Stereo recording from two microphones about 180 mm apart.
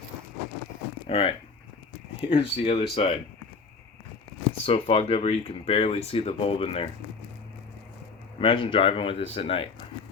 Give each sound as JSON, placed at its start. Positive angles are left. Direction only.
{"t": 1.0, "sound": "speech", "side_deg": 30}
{"t": 2.3, "sound": "speech", "side_deg": 30}
{"t": 4.6, "sound": "speech", "side_deg": 30}
{"t": 8.4, "sound": "speech", "side_deg": 30}